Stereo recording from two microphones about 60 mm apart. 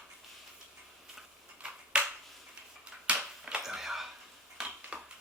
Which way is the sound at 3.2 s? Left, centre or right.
Centre.